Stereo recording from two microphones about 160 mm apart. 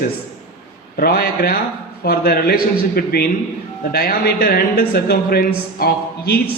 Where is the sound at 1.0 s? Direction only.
70° left (ahead or behind).